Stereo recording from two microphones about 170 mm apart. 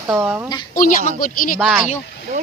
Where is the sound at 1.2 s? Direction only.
55° left (ahead or behind).